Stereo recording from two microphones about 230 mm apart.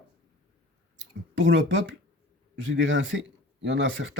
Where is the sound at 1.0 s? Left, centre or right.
Right.